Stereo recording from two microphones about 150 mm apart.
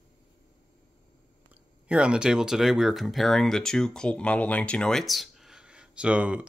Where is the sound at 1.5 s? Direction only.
5° right (ahead or behind).